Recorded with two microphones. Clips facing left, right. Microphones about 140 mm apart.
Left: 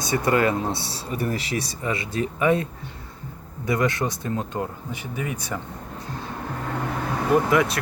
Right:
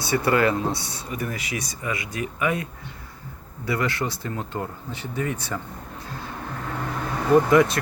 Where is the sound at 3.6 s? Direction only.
20° left (ahead or behind).